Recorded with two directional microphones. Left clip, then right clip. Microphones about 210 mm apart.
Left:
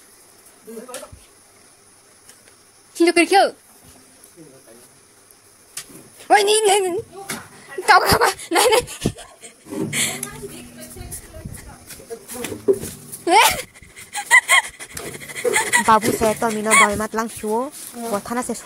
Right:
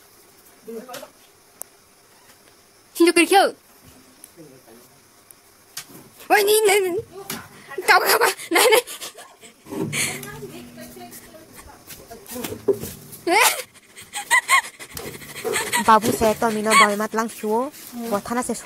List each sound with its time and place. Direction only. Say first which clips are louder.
2.9 s speech: even; 10° right (ahead or behind)
6.2 s speech: left 2 dB; 5° right (ahead or behind)
12.7 s speech: left 3 dB; 25° left (ahead or behind)
13.2 s dog: left 3 dB; 10° left (ahead or behind)
16.1 s speech: even; centre (ahead or behind)